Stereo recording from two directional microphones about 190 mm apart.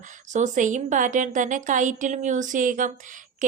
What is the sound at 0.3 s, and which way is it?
A woman's voice, 40° right (ahead or behind).